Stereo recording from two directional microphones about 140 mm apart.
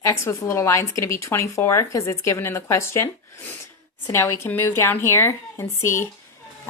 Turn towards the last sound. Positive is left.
turn(degrees=20)  # may be behind; listen again after turning